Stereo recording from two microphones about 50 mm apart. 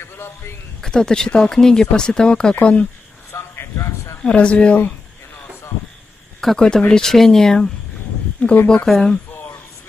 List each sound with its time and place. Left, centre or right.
0.7 s speech: centre
3.5 s a sound: left
4.2 s speech: left
6.4 s speech: centre
8.4 s speech: left
8.8 s speech: centre